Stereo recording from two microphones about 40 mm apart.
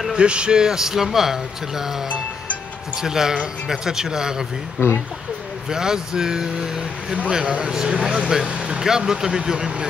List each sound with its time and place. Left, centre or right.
0.1 s speech: right; by 1.9 s centre
3.0 s speech: centre
4.8 s speech: left
5.7 s speech: centre
8.8 s speech: centre